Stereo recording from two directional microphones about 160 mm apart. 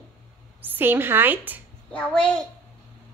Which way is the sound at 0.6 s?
15° right (ahead or behind).